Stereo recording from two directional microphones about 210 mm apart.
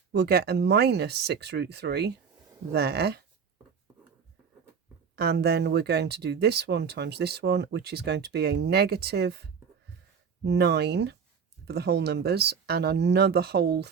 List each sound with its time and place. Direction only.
0.1 s speech: 50° right (ahead or behind)
5.1 s speech: 50° right (ahead or behind)